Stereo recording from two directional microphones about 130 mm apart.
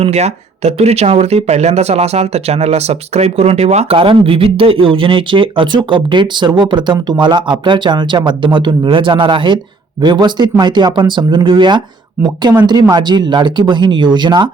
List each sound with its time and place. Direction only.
0.0 s speech: 55° right (ahead or behind); by 14.5 s 35° right (ahead or behind)